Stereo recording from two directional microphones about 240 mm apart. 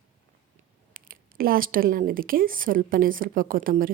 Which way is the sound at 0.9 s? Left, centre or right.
Right.